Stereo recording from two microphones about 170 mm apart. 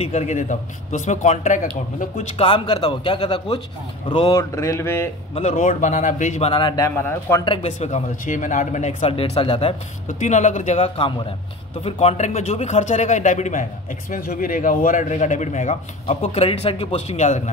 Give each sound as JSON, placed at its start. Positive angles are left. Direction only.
{"t": 0.0, "sound": "a man's voice", "side_deg": 40}
{"t": 2.3, "sound": "speech", "side_deg": 30}
{"t": 4.4, "sound": "a sound", "side_deg": 15}
{"t": 5.3, "sound": "a man's voice", "side_deg": 40}
{"t": 6.5, "sound": "speech", "side_deg": 25}
{"t": 7.4, "sound": "speech", "side_deg": 35}
{"t": 10.0, "sound": "a man's voice", "side_deg": 45}